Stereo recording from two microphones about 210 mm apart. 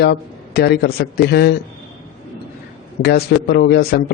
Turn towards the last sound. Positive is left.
turn(degrees=50)  # may be behind; listen again after turning